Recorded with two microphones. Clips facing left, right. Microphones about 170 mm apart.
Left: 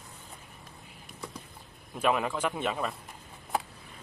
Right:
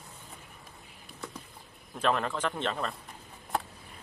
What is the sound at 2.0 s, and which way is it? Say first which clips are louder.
Speech: left 1 dB; 10° left (ahead or behind).